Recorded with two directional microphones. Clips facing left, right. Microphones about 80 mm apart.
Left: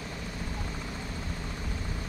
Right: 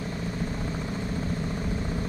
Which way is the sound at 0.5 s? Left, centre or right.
Right.